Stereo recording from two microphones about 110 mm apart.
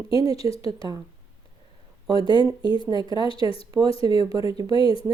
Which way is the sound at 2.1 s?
50° left (ahead or behind).